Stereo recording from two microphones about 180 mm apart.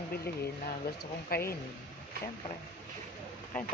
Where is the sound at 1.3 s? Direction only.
55° left (ahead or behind).